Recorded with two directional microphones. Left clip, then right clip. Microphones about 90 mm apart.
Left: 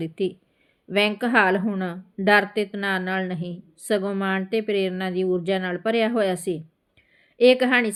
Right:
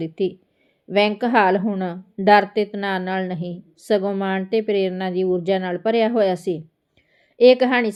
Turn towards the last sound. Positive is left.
turn(degrees=-45)  # may be behind; listen again after turning